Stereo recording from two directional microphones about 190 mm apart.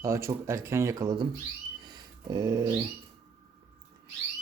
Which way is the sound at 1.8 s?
20° right (ahead or behind).